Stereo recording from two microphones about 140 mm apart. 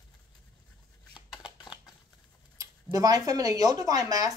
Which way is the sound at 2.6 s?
25° right (ahead or behind).